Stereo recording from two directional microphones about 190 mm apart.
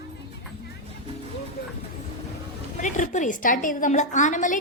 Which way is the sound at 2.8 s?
40° left (ahead or behind).